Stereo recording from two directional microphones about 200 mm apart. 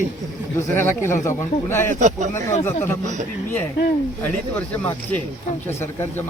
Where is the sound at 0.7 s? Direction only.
10° left (ahead or behind).